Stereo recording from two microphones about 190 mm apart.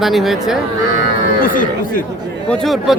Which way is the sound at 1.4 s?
45° left (ahead or behind).